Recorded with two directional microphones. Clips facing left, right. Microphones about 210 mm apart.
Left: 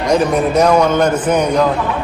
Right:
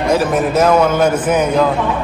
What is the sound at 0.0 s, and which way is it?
A man's voice, 5° right (ahead or behind).